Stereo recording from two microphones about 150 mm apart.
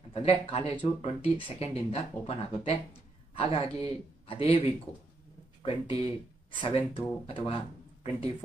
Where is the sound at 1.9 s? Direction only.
40° left (ahead or behind).